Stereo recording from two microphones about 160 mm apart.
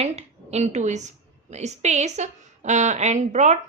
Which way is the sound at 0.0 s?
40° right (ahead or behind).